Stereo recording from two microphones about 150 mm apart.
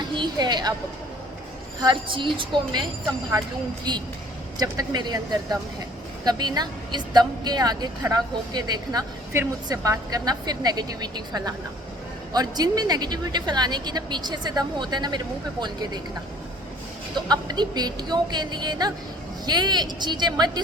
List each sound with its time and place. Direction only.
0.2 s a woman's voice: 30° right (ahead or behind)
1.8 s a woman's voice: 30° right (ahead or behind)
4.5 s a woman's voice: 25° right (ahead or behind)
17.2 s a woman's voice: 30° right (ahead or behind)